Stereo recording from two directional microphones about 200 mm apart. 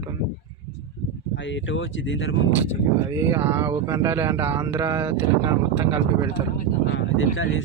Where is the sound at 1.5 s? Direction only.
70° left (ahead or behind).